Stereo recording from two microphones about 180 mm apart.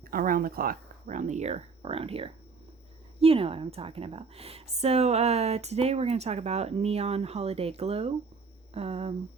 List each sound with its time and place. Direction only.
0.1 s a woman's voice: 50° right (ahead or behind); by 9.1 s 35° right (ahead or behind)